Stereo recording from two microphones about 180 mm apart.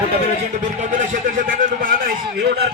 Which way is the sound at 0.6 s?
40° right (ahead or behind).